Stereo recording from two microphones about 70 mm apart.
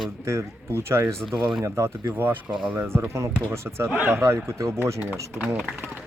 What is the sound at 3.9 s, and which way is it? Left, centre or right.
Speech, right.